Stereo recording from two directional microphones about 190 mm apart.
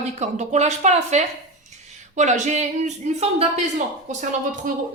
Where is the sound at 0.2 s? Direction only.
35° right (ahead or behind).